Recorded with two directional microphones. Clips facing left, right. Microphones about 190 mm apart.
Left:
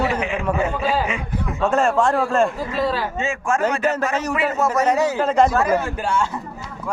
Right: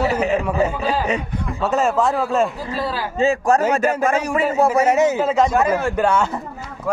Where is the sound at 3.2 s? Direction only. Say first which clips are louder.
Right 6 dB; 35° right (ahead or behind).